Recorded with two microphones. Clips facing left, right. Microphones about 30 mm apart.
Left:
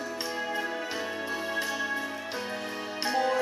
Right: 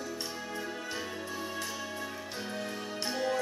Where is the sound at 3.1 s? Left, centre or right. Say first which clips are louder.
Left 6 dB; left.